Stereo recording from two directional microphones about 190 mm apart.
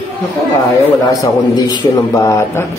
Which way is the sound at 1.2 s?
20° left (ahead or behind).